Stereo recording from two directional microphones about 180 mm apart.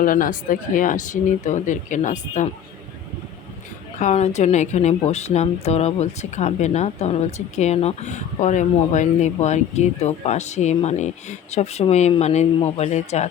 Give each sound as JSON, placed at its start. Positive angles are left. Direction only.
{"t": 0.0, "sound": "speech", "side_deg": 50}
{"t": 3.9, "sound": "speech", "side_deg": 40}